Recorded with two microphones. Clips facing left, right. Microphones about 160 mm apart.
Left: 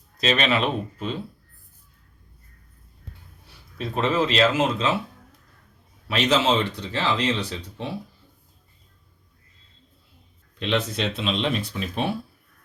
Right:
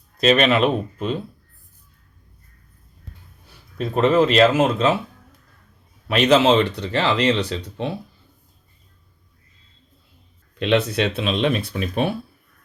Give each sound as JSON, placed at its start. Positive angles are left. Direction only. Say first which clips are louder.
{"t": 0.2, "sound": "speech", "louder": "right 6 dB", "side_deg": -50}
{"t": 3.8, "sound": "speech", "louder": "right 6 dB", "side_deg": -50}
{"t": 6.1, "sound": "speech", "louder": "right 6 dB", "side_deg": -60}
{"t": 10.6, "sound": "speech", "louder": "right 6 dB", "side_deg": -65}